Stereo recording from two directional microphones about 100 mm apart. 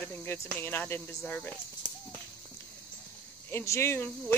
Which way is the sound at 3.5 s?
25° left (ahead or behind).